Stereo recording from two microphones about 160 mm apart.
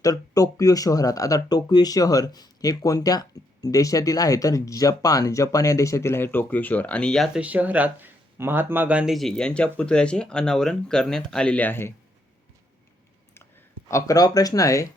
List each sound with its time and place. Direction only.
0.0 s speech: 20° left (ahead or behind); by 7.4 s 5° left (ahead or behind)
7.4 s speech: 10° right (ahead or behind); by 11.9 s 15° left (ahead or behind)
13.8 s speech: 20° left (ahead or behind)